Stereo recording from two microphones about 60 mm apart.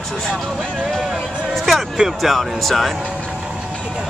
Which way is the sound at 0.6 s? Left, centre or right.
Centre.